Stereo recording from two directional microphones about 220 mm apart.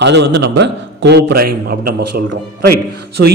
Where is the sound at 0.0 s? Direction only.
50° right (ahead or behind).